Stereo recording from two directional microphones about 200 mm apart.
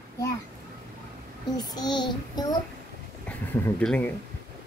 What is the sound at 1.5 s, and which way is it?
Child singing, 20° left (ahead or behind).